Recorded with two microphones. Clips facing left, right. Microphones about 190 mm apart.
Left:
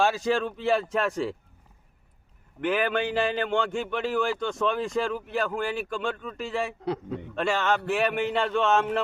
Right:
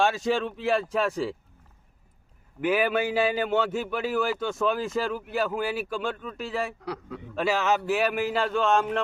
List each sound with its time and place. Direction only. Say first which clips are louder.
0.0 s a man's voice: even; centre (ahead or behind)
2.6 s a man's voice: right 1 dB; 5° right (ahead or behind)
6.8 s a man's voice: left 5 dB; 25° left (ahead or behind)
7.3 s a man's voice: right 1 dB; 5° right (ahead or behind)